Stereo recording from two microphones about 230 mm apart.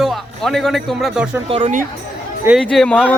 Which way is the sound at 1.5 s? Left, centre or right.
Right.